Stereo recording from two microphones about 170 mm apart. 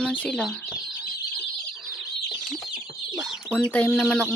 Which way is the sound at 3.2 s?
5° left (ahead or behind).